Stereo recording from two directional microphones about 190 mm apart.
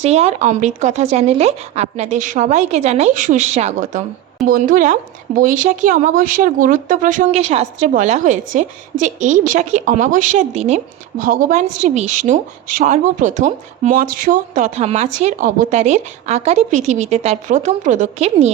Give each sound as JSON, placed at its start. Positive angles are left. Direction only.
{"t": 0.0, "sound": "a woman's voice", "side_deg": -35}